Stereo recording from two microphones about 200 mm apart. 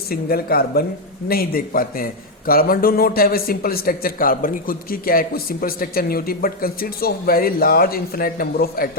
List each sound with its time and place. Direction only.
0.1 s a man's voice: 50° left (ahead or behind)